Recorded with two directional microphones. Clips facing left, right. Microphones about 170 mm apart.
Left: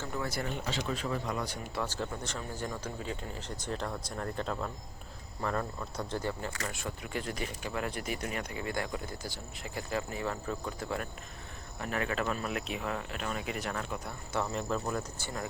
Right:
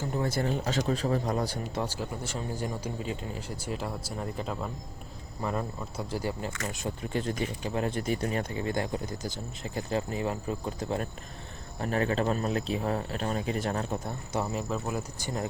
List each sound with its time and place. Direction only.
0.1 s speech: 25° right (ahead or behind)
0.5 s speech: 40° right (ahead or behind)
1.7 s speech: 15° right (ahead or behind)
6.7 s speech: 20° right (ahead or behind)
14.5 s speech: 5° right (ahead or behind)
15.2 s speech: 20° right (ahead or behind)